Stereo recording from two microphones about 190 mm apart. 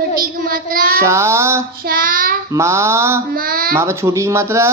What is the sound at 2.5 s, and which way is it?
Speech, 15° right (ahead or behind).